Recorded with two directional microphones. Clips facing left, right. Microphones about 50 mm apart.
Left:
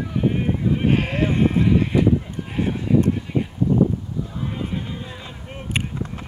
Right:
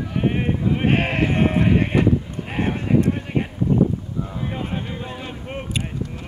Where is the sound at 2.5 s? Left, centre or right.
Right.